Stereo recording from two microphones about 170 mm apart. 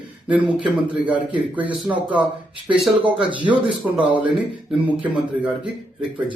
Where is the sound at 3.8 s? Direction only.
10° right (ahead or behind).